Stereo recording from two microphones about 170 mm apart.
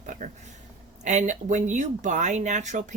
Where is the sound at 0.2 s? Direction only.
50° right (ahead or behind).